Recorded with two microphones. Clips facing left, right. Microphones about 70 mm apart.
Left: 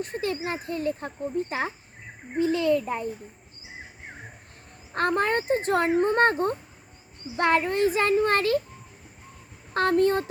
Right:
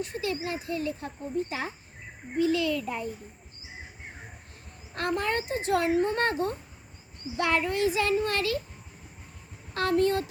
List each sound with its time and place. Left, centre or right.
0.0 s a child's voice: left
4.9 s a child's voice: left
9.7 s a child's voice: left